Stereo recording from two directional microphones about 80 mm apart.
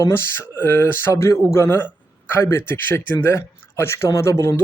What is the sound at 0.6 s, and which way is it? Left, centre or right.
Speech, left.